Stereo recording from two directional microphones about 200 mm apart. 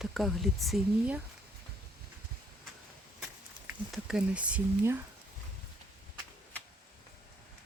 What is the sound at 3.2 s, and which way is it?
Speech, 5° right (ahead or behind).